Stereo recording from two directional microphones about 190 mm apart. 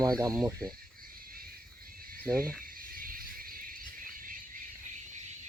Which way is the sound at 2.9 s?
50° right (ahead or behind).